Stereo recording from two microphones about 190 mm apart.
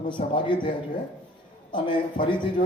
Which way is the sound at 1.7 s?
25° left (ahead or behind).